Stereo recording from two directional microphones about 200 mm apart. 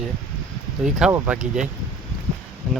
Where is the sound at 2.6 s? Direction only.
5° right (ahead or behind).